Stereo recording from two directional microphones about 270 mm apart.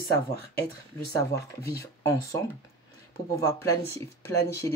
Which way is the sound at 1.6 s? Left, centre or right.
Left.